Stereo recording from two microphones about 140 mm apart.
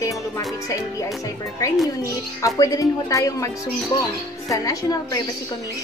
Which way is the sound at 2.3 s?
25° left (ahead or behind).